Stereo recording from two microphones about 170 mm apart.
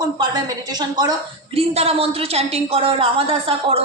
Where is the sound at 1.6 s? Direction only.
35° right (ahead or behind).